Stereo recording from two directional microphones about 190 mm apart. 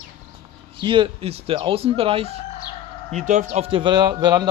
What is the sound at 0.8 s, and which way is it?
Speech, 25° right (ahead or behind).